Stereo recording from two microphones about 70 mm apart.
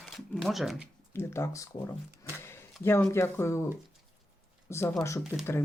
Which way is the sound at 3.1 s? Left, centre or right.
Left.